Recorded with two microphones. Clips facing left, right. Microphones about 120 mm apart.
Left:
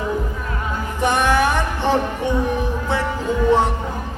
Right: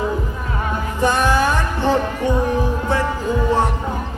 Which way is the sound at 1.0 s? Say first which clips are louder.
Even; 20° left (ahead or behind).